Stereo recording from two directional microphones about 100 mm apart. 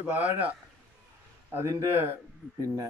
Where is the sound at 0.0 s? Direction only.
15° right (ahead or behind).